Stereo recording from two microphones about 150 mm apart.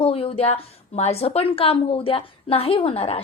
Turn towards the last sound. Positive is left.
turn(degrees=40)  # may be behind; listen again after turning